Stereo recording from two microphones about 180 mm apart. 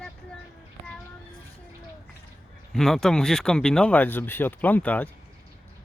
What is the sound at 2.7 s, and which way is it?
Speech, centre (ahead or behind).